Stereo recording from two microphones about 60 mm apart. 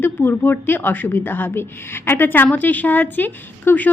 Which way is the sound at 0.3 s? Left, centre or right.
Left.